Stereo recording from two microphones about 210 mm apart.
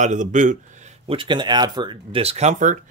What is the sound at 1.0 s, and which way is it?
Speech, 25° right (ahead or behind).